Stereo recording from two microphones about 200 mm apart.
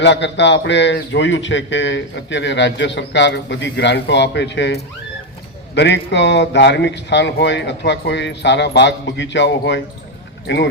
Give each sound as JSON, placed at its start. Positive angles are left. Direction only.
{"t": 0.0, "sound": "a man's voice", "side_deg": 60}